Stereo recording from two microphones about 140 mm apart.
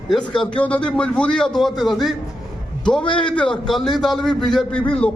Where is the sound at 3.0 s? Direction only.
35° left (ahead or behind).